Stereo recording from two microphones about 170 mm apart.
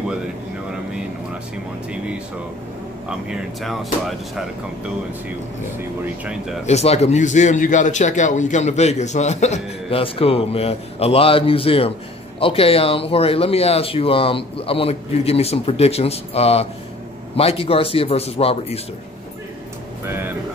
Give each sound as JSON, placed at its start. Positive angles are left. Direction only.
{"t": 3.1, "sound": "speech", "side_deg": -5}
{"t": 5.8, "sound": "speech", "side_deg": -5}
{"t": 6.6, "sound": "a man's voice", "side_deg": 40}
{"t": 20.1, "sound": "speech", "side_deg": -15}